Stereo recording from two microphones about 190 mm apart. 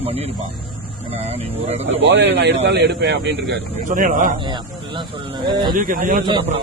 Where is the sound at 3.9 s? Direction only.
45° right (ahead or behind).